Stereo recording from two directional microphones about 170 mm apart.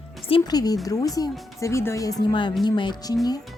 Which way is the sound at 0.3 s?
25° left (ahead or behind).